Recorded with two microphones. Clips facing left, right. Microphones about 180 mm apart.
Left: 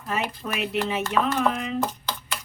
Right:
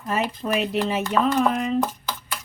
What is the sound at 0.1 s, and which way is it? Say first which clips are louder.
Speech: right 5 dB; 40° right (ahead or behind).